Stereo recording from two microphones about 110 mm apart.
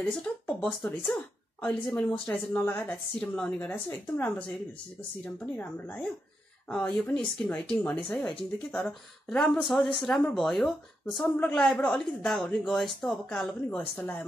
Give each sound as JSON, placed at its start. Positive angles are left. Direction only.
{"t": 0.1, "sound": "speech", "side_deg": 10}
{"t": 11.3, "sound": "speech", "side_deg": 15}
{"t": 13.7, "sound": "speech", "side_deg": 15}